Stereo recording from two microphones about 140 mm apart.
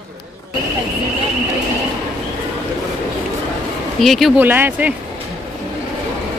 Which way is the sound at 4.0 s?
Centre (ahead or behind).